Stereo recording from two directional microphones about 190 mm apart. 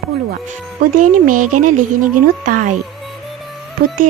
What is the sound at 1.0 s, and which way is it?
Speech, 45° right (ahead or behind).